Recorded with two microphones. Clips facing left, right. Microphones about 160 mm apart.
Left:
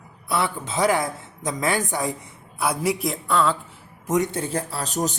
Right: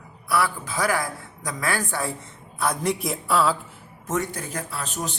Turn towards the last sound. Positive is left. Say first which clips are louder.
# left 5 dB
turn(degrees=40)  # may be behind; listen again after turning